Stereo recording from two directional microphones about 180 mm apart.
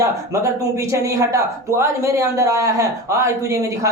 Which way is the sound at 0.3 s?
20° right (ahead or behind).